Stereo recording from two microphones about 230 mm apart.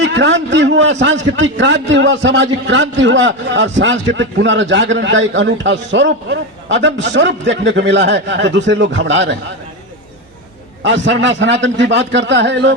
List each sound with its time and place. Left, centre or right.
0.0 s a man's voice: right
10.8 s a man's voice: right